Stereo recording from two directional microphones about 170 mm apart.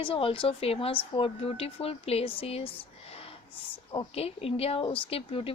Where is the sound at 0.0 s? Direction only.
30° left (ahead or behind).